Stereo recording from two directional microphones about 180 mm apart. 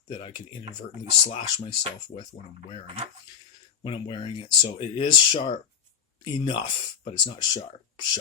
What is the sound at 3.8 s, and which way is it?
Speech, 30° left (ahead or behind).